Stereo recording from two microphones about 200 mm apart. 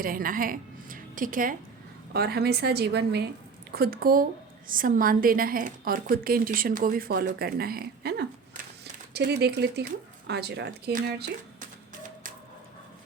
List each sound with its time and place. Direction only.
0.0 s a woman's voice: 45° right (ahead or behind)